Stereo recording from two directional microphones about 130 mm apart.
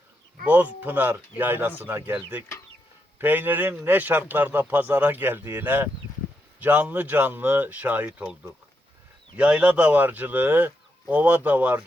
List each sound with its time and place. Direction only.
0.4 s speech: 10° right (ahead or behind)